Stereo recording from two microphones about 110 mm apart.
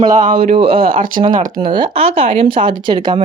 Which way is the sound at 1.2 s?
45° right (ahead or behind).